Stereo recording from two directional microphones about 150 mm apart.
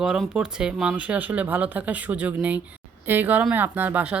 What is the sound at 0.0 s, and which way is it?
Speech, 5° right (ahead or behind).